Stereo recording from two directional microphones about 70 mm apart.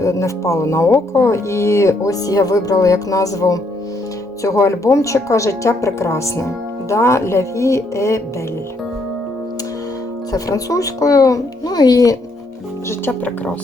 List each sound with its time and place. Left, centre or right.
0.0 s speech: left
10.3 s a child's voice: left
13.1 s speech: left